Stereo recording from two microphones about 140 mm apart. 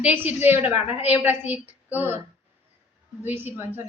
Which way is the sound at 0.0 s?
10° right (ahead or behind).